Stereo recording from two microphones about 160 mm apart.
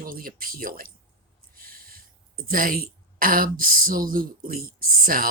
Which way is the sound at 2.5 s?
60° right (ahead or behind).